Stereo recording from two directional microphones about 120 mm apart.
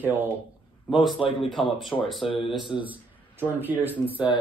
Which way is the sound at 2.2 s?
45° left (ahead or behind).